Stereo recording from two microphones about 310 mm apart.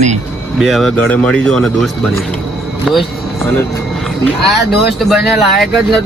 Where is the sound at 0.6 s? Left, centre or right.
Centre.